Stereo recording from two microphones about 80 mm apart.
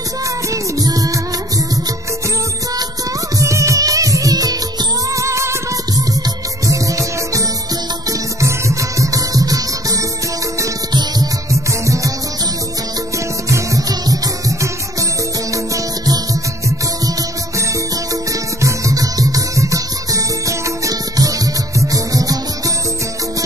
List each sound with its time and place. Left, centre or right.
0.5 s music: right
3.3 s music: right
5.1 s music: right
6.7 s music: right
10.9 s music: right
11.8 s music: right
13.5 s music: right
18.6 s music: right